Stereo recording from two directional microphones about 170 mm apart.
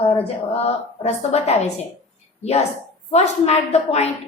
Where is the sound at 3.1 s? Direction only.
40° left (ahead or behind).